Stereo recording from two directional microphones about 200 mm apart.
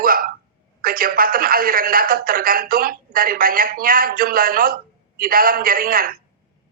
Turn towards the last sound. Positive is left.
turn(degrees=-45)  # may be behind; listen again after turning